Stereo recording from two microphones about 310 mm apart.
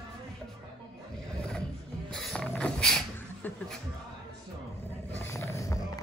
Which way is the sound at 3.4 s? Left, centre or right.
Centre.